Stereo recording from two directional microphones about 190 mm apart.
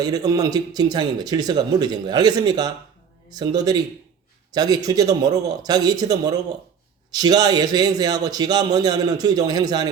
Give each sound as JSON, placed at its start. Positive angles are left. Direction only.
{"t": 0.3, "sound": "speech", "side_deg": -20}